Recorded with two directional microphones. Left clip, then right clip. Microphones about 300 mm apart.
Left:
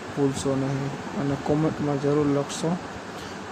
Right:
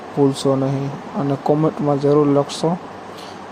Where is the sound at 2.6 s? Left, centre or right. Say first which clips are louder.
Right 8 dB; centre.